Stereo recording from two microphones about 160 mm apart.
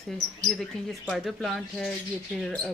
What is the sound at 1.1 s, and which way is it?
Speech, centre (ahead or behind).